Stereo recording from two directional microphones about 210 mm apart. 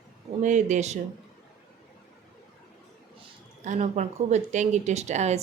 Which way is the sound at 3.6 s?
35° right (ahead or behind).